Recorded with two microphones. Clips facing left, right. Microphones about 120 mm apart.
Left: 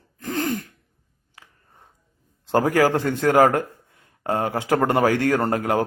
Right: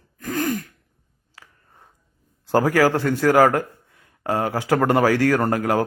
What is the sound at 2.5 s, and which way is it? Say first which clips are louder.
A man's voice: right 1 dB; 20° left (ahead or behind).